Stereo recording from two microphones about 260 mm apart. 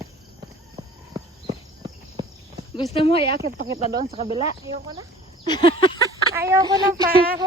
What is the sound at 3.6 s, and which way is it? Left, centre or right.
Speech, centre.